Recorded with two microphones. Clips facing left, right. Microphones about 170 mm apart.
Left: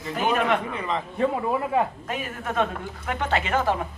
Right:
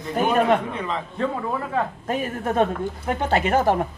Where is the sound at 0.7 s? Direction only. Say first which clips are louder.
Right 1 dB; centre (ahead or behind).